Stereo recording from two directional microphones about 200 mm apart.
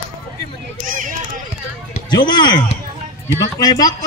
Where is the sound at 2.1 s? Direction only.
20° left (ahead or behind).